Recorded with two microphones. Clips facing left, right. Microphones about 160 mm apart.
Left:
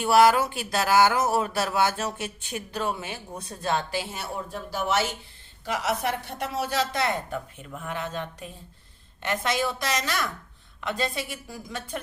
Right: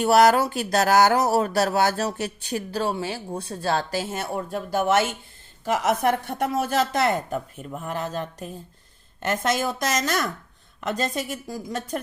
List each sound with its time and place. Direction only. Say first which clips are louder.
0.0 s a woman's voice: right 2 dB; 40° right (ahead or behind)